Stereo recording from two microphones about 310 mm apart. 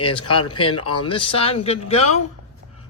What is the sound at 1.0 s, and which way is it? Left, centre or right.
Speech, centre.